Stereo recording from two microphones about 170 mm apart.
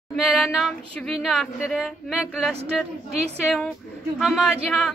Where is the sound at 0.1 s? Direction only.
Centre (ahead or behind).